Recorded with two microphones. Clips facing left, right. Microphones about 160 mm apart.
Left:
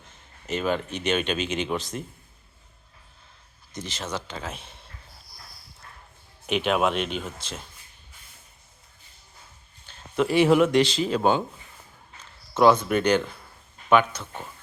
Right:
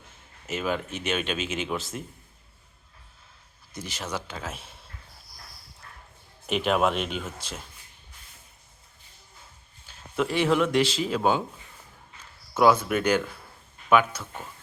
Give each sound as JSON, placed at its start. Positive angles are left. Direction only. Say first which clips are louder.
{"t": 0.0, "sound": "speech", "louder": "left 2 dB", "side_deg": -5}
{"t": 3.7, "sound": "speech", "louder": "left 1 dB", "side_deg": -10}
{"t": 6.5, "sound": "speech", "louder": "left 1 dB", "side_deg": 0}
{"t": 9.8, "sound": "a sound", "louder": "left 3 dB", "side_deg": -5}
{"t": 10.7, "sound": "speech", "louder": "left 3 dB", "side_deg": -5}
{"t": 12.5, "sound": "speech", "louder": "left 2 dB", "side_deg": -5}